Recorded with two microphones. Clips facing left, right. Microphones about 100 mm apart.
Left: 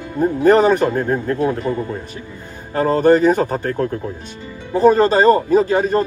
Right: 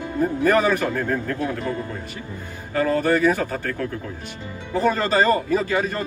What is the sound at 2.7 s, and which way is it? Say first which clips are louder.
Speech: left 6 dB; 25° left (ahead or behind).